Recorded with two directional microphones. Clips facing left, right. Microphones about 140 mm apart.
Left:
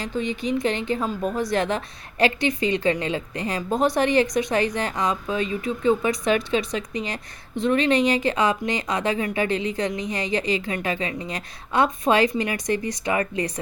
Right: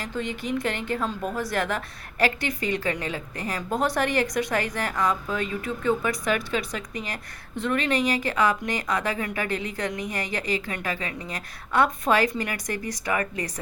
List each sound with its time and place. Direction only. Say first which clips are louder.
0.0 s a woman's voice: left 4 dB; 15° left (ahead or behind)